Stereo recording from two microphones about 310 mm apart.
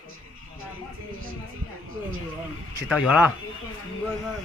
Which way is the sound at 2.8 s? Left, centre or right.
Centre.